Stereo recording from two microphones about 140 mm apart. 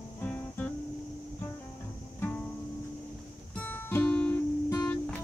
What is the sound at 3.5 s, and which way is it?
Music, 10° left (ahead or behind).